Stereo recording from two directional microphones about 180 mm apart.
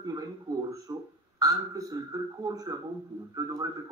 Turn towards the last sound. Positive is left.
turn(degrees=-20)  # may be behind; listen again after turning